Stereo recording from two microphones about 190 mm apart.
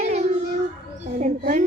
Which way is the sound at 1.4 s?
45° right (ahead or behind).